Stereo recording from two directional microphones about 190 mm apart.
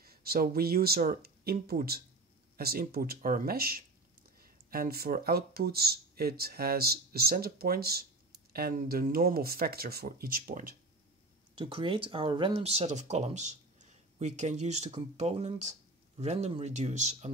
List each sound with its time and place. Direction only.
0.0 s speech: 50° right (ahead or behind)
11.5 s speech: 25° right (ahead or behind)